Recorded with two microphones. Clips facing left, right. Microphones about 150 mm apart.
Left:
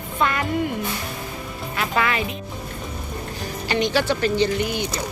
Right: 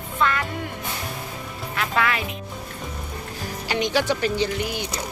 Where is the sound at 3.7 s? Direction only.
15° right (ahead or behind).